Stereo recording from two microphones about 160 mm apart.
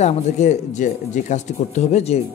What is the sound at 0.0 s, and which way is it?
Speech, 45° left (ahead or behind).